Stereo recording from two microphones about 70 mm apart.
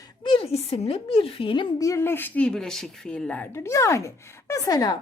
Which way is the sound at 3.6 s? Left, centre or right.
Left.